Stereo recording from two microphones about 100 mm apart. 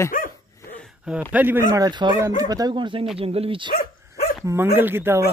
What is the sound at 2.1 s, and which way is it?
Speech, 35° right (ahead or behind).